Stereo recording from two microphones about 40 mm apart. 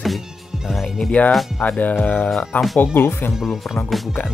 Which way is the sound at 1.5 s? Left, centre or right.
Left.